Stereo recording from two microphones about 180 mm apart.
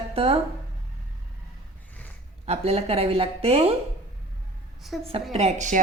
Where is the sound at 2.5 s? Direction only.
35° right (ahead or behind).